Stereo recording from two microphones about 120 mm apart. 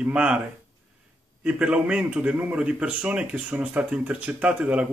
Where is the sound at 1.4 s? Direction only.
10° right (ahead or behind).